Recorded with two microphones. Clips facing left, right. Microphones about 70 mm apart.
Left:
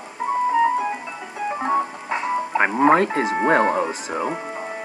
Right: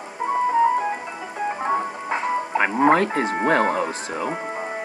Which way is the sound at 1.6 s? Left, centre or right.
Centre.